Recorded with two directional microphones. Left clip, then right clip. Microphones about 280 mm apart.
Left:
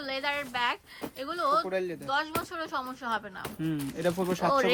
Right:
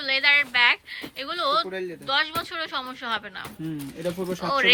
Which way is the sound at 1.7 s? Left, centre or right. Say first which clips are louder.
Left 1 dB; left.